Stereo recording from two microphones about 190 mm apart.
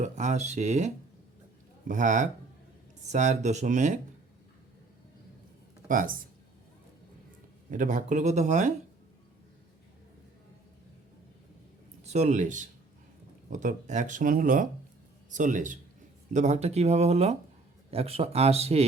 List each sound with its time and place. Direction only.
0.0 s speech: 40° right (ahead or behind)
1.9 s speech: 40° right (ahead or behind)
5.9 s speech: 45° right (ahead or behind)
7.7 s speech: 45° right (ahead or behind)
12.0 s speech: 35° right (ahead or behind)